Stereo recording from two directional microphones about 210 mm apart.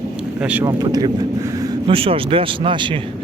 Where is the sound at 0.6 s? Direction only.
20° right (ahead or behind).